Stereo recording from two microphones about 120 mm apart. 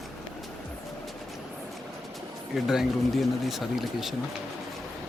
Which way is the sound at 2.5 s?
Centre (ahead or behind).